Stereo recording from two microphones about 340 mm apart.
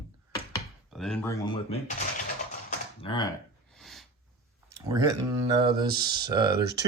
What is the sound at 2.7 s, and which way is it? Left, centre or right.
Typing, centre.